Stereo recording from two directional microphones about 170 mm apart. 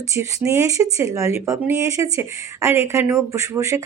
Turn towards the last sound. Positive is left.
turn(degrees=-15)  # may be behind; listen again after turning